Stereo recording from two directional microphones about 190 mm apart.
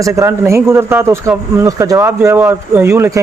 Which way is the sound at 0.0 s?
15° right (ahead or behind).